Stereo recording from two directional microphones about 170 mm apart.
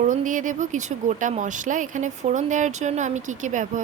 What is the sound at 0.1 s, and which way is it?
Speech, 50° right (ahead or behind).